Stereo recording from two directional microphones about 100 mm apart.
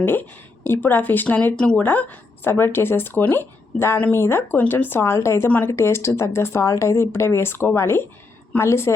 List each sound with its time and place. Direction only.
0.0 s speech: 20° left (ahead or behind)
1.5 s speech: 10° left (ahead or behind); by 9.0 s 25° left (ahead or behind)